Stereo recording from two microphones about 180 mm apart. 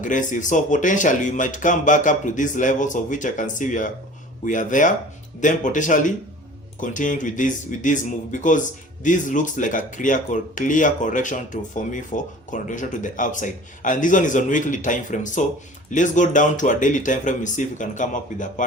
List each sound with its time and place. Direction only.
0.0 s speech: 45° left (ahead or behind)